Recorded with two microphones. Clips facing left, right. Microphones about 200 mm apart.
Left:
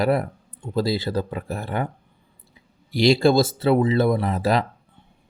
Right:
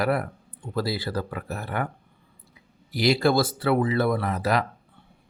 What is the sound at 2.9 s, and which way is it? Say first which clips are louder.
Speech: left 4 dB; 25° left (ahead or behind).